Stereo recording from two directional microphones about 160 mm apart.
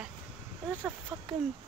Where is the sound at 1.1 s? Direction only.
5° right (ahead or behind).